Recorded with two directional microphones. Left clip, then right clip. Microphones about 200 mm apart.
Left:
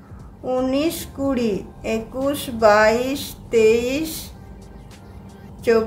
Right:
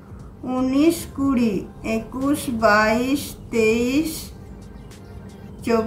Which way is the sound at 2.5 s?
30° left (ahead or behind).